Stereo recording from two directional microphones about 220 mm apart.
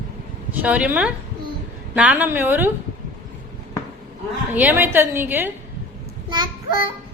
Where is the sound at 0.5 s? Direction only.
5° right (ahead or behind).